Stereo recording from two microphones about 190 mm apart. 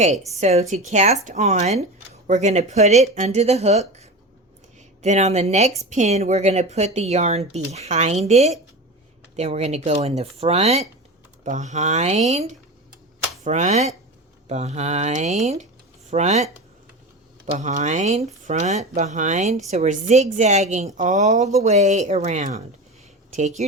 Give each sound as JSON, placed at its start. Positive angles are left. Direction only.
{"t": 0.3, "sound": "speech", "side_deg": -35}